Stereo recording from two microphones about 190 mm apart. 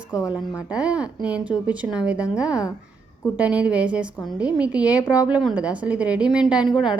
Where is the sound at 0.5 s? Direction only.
5° right (ahead or behind).